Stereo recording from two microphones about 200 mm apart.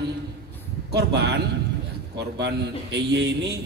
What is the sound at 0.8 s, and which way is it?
A man's voice, 55° right (ahead or behind).